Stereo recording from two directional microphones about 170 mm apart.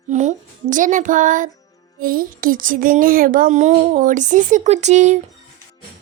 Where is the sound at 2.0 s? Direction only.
55° right (ahead or behind).